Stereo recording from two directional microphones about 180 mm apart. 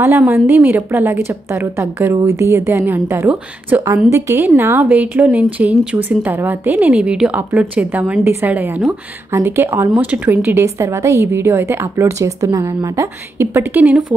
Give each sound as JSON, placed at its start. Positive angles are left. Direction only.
{"t": 0.0, "sound": "a woman's voice", "side_deg": -10}